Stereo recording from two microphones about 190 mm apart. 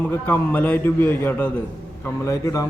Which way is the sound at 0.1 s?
10° left (ahead or behind).